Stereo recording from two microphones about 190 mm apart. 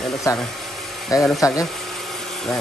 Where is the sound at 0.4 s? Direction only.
Centre (ahead or behind).